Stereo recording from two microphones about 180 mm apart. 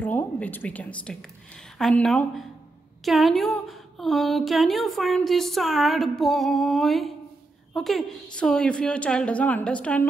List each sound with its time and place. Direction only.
0.0 s a woman's voice: 10° left (ahead or behind)